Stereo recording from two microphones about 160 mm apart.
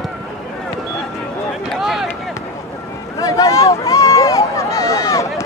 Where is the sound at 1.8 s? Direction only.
Centre (ahead or behind).